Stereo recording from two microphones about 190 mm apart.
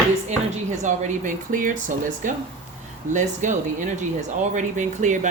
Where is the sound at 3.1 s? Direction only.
40° right (ahead or behind).